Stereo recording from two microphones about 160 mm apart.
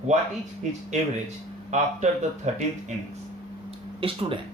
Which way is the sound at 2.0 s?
45° right (ahead or behind).